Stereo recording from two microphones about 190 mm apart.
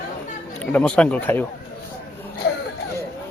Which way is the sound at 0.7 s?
5° left (ahead or behind).